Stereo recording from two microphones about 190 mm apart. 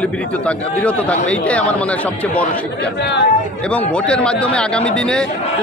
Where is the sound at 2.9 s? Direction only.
65° left (ahead or behind).